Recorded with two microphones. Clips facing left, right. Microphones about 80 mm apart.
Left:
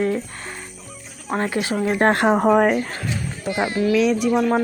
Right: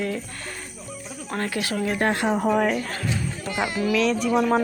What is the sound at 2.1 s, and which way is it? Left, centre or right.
Speech, left.